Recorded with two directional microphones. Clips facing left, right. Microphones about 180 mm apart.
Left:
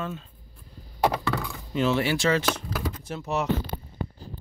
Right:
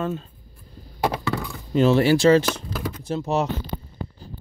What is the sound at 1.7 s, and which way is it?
Speech, 35° right (ahead or behind).